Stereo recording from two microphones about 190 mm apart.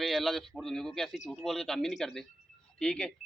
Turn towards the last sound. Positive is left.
turn(degrees=5)  # may be behind; listen again after turning